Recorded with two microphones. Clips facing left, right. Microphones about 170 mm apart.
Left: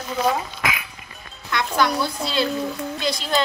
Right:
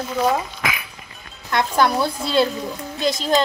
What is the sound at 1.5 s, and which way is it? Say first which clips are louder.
A child's voice: right 3 dB; 50° right (ahead or behind).